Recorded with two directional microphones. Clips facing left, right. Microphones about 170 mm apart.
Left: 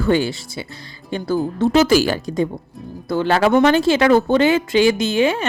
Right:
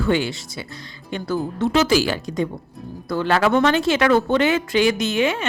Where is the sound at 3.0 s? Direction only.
30° left (ahead or behind).